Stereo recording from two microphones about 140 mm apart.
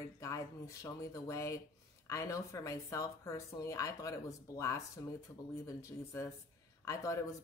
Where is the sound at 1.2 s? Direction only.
20° left (ahead or behind).